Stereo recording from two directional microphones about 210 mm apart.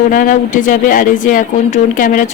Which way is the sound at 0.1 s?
40° left (ahead or behind).